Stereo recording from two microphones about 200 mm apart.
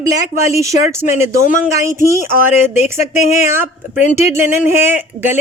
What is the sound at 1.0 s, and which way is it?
Speech, 40° left (ahead or behind).